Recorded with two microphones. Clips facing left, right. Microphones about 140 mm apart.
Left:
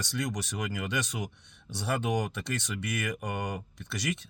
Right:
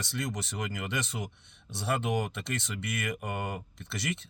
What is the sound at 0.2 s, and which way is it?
Speech, 25° right (ahead or behind).